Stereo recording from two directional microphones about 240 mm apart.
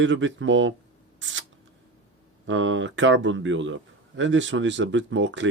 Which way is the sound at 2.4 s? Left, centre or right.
Right.